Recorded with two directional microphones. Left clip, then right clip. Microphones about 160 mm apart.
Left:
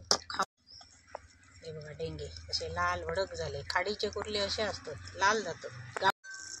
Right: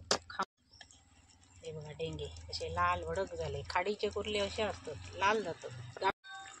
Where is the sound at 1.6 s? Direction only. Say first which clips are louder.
Left 1 dB; 20° right (ahead or behind).